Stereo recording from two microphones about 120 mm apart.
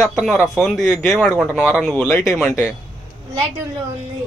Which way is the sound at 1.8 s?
10° left (ahead or behind).